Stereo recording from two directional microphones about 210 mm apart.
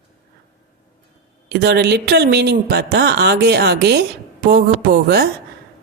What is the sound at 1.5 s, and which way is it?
Speech, 50° right (ahead or behind).